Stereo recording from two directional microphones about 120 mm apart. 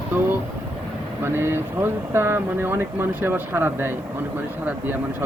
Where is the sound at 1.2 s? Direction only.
20° right (ahead or behind).